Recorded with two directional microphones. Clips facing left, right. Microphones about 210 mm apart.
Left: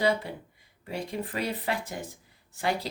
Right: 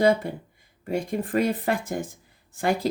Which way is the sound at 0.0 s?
45° right (ahead or behind).